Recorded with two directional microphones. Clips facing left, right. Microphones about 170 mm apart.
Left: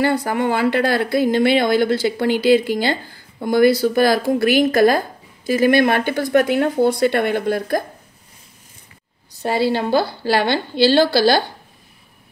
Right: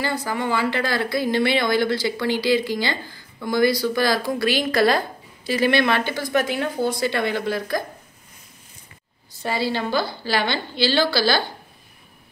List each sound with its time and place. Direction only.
0.0 s speech: 60° left (ahead or behind)
9.6 s a woman's voice: 55° left (ahead or behind)